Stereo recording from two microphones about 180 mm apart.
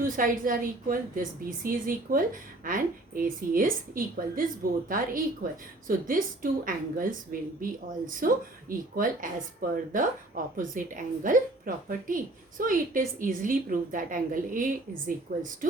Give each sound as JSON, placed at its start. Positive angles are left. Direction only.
{"t": 0.0, "sound": "a woman's voice", "side_deg": -50}